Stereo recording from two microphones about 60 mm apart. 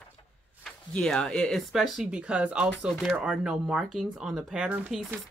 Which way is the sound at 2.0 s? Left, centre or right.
Centre.